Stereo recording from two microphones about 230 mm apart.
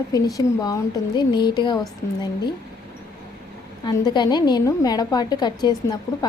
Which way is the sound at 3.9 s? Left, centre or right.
Centre.